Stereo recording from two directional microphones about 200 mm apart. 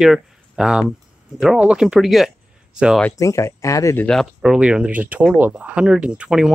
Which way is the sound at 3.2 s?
15° left (ahead or behind).